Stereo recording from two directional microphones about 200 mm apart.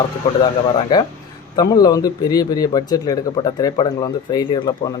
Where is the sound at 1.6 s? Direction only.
20° left (ahead or behind).